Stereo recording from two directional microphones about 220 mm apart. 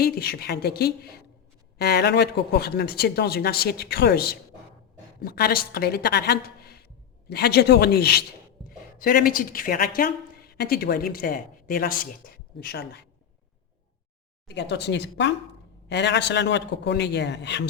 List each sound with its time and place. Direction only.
0.0 s a woman's voice: 45° left (ahead or behind)
14.4 s speech: 50° left (ahead or behind)